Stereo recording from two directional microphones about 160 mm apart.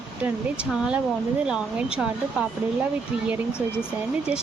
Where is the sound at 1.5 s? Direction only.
5° right (ahead or behind).